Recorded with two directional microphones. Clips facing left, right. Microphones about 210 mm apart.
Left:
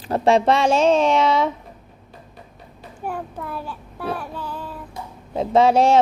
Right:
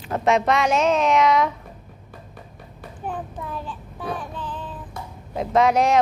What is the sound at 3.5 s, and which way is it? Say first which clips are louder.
Child singing: left 1 dB; 10° left (ahead or behind).